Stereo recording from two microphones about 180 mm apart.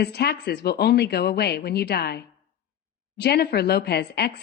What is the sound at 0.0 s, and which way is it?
A woman's voice, 65° left (ahead or behind).